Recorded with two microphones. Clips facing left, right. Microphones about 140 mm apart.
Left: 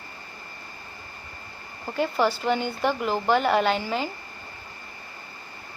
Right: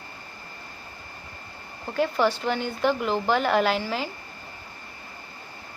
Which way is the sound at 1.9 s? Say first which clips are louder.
Right 1 dB; centre (ahead or behind).